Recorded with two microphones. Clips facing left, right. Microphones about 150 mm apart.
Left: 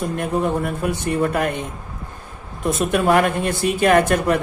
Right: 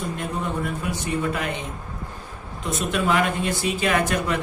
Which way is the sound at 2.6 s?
55° left (ahead or behind).